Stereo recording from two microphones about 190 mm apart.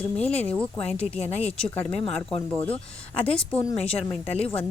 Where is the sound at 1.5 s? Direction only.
5° left (ahead or behind).